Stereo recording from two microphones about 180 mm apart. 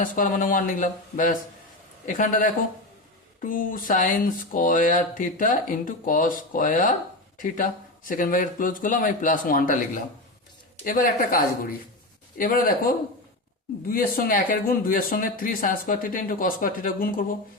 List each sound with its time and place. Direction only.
0.0 s speech: 45° left (ahead or behind)